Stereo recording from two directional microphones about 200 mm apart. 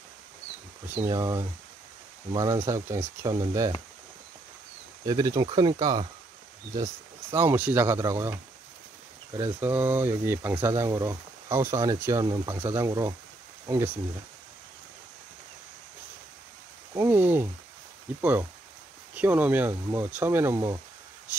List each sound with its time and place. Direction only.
0.8 s speech: 15° right (ahead or behind)
5.0 s speech: 20° right (ahead or behind)
9.4 s speech: 10° right (ahead or behind)
16.9 s a sound: 10° right (ahead or behind)
18.2 s speech: 10° right (ahead or behind)